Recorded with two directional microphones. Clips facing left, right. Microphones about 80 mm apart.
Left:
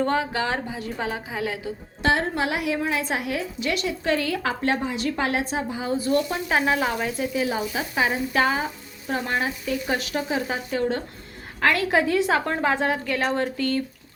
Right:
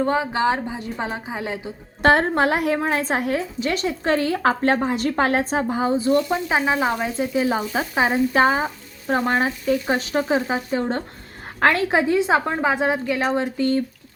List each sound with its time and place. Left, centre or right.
0.0 s a woman's voice: centre
2.0 s a woman's voice: right
5.9 s speech: right
7.2 s a woman's voice: right